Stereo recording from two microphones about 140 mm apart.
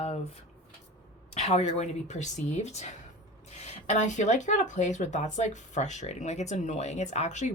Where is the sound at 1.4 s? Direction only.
50° left (ahead or behind).